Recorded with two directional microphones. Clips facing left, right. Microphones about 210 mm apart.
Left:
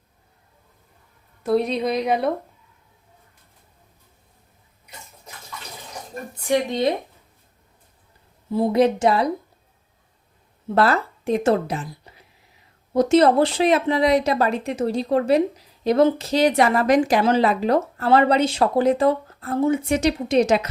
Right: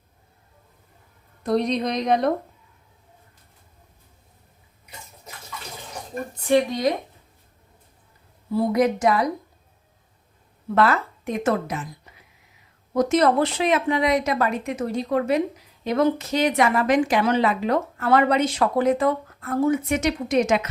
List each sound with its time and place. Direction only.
1.5 s speech: 5° left (ahead or behind)
6.7 s speech: 25° left (ahead or behind)
8.5 s speech: 30° left (ahead or behind)
10.8 s a woman's voice: 35° left (ahead or behind)